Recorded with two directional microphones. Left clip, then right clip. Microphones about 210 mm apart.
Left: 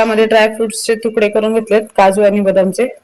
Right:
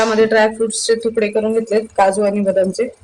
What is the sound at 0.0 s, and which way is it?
Speech, 25° left (ahead or behind).